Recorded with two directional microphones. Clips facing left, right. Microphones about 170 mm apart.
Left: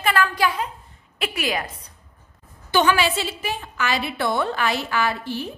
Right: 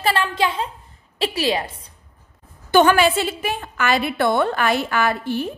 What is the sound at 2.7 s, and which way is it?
A woman's voice, 50° right (ahead or behind).